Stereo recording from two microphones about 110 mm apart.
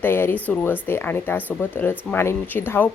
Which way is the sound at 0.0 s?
20° left (ahead or behind).